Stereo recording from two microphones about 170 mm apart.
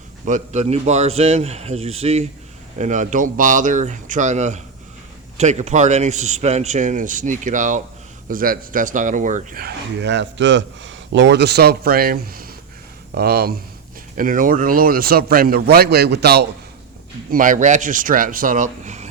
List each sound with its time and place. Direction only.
0.3 s a man's voice: 45° right (ahead or behind); by 13.5 s 65° right (ahead or behind)
14.2 s speech: 50° right (ahead or behind); by 16.5 s 75° right (ahead or behind)
17.3 s a man's voice: 50° right (ahead or behind)